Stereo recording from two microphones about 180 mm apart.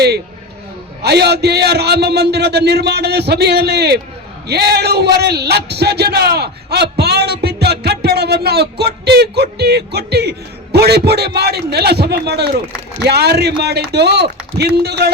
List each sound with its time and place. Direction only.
1.0 s a man's voice: 65° right (ahead or behind)